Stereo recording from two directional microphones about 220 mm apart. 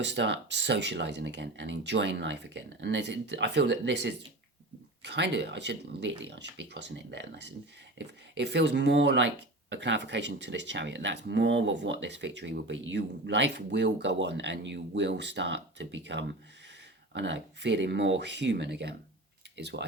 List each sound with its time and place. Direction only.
0.0 s speech: 55° right (ahead or behind)